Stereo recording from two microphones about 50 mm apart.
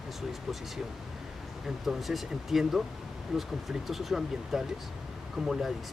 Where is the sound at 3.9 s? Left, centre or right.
Centre.